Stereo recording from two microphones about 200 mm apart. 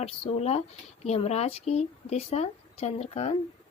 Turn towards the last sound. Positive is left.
turn(degrees=30)  # may be behind; listen again after turning